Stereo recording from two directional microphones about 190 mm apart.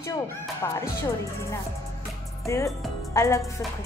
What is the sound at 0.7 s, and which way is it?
Music, 15° left (ahead or behind).